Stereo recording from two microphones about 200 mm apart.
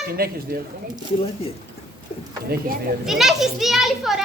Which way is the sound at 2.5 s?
50° right (ahead or behind).